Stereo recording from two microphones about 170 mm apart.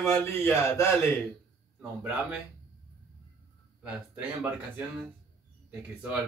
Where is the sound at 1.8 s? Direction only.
10° right (ahead or behind).